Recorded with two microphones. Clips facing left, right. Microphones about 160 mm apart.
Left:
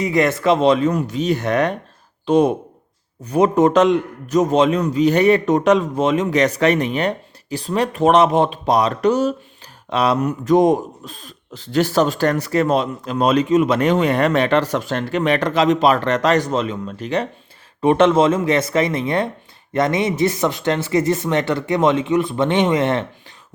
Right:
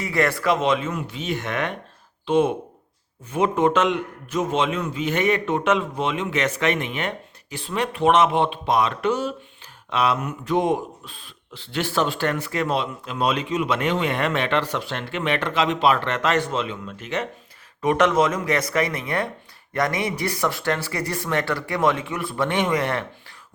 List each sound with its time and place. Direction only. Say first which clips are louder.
0.0 s speech: left 5 dB; 20° left (ahead or behind)